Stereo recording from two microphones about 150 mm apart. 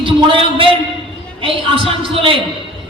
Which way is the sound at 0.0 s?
35° right (ahead or behind).